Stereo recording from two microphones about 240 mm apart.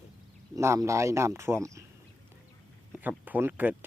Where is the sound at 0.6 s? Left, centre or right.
Centre.